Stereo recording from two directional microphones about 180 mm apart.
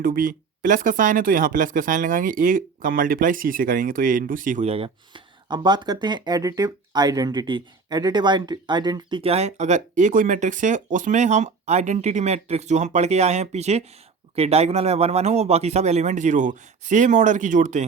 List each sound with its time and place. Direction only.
0.0 s speech: 50° right (ahead or behind)